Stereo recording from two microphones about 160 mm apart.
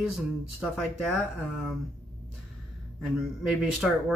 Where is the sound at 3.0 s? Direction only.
5° right (ahead or behind).